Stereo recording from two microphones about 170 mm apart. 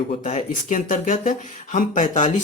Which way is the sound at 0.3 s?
45° left (ahead or behind).